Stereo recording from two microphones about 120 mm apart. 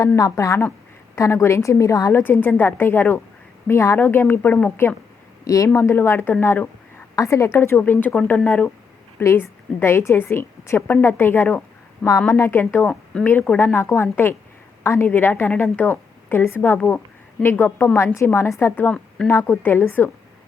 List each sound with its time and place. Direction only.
0.2 s a woman's voice: 25° left (ahead or behind)
5.5 s a woman's voice: 25° left (ahead or behind)
8.1 s a woman's voice: 5° left (ahead or behind)
19.3 s a woman's voice: 20° left (ahead or behind)